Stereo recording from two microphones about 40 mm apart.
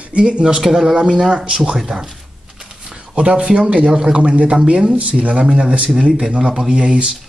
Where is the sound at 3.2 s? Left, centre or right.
Right.